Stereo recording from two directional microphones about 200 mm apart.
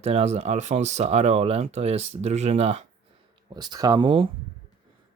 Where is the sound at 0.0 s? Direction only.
30° right (ahead or behind).